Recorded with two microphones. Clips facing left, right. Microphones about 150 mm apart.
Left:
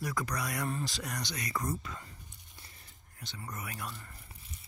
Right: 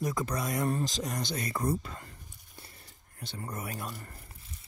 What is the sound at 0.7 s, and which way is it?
Speech, 40° right (ahead or behind).